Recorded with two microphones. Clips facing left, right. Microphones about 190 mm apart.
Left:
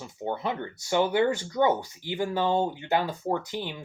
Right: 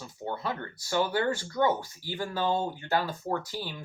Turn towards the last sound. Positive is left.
turn(degrees=20)  # may be behind; listen again after turning